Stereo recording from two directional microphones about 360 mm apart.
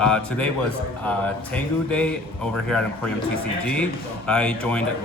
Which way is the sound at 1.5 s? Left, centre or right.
Centre.